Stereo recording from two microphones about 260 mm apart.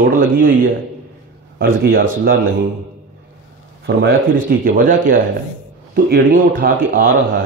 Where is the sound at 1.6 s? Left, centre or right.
Right.